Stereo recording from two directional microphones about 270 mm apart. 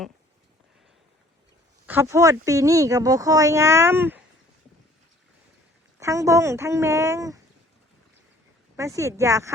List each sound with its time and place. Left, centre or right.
1.9 s speech: centre
6.0 s speech: centre
8.7 s speech: centre